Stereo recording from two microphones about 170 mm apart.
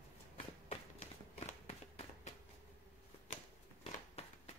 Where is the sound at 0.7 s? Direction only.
40° left (ahead or behind).